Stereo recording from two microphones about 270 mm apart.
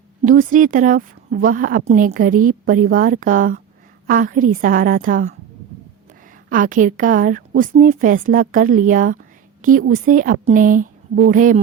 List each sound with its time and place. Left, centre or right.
0.2 s a woman's voice: right
6.5 s a woman's voice: right